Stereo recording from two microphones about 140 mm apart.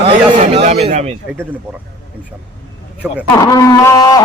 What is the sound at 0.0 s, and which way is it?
A man's voice, 50° right (ahead or behind).